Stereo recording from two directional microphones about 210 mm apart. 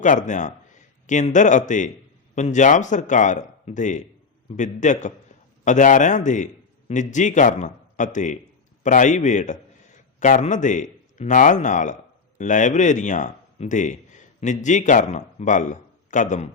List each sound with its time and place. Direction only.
0.0 s a man's voice: 35° left (ahead or behind)